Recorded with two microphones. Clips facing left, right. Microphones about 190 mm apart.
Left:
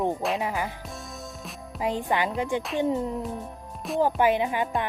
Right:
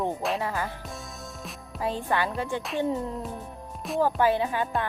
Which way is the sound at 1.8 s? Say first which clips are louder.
Left 1 dB; 15° left (ahead or behind).